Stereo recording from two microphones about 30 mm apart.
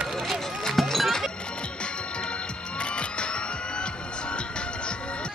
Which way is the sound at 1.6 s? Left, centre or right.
Left.